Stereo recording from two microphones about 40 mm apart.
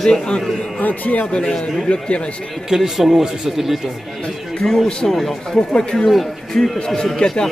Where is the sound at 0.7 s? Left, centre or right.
Left.